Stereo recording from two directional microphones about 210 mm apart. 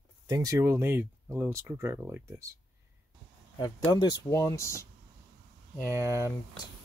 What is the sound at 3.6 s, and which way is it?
Speech, 20° left (ahead or behind).